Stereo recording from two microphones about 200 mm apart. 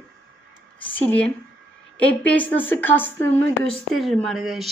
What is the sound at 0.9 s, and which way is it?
Speech, 5° left (ahead or behind).